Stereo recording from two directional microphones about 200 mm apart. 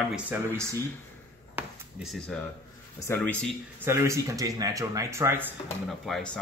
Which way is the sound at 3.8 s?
15° right (ahead or behind).